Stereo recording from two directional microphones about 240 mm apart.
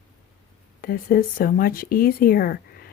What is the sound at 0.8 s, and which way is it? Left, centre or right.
A woman's voice, left.